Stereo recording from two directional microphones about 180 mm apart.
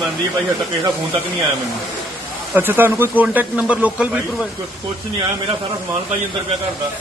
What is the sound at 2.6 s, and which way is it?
A man's voice, 10° right (ahead or behind).